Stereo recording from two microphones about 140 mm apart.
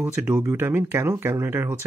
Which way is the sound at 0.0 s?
15° right (ahead or behind).